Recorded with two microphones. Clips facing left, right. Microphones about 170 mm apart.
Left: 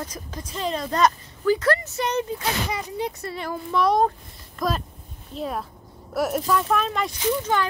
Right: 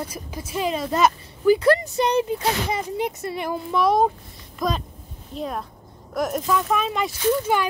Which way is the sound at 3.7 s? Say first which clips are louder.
Right 1 dB; centre (ahead or behind).